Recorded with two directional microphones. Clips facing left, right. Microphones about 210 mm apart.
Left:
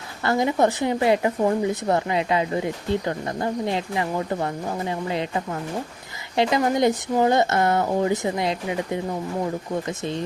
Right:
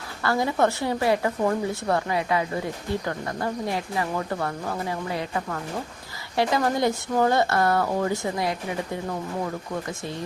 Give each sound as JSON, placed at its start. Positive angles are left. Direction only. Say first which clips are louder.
{"t": 0.2, "sound": "a woman's voice", "louder": "left 2 dB", "side_deg": 20}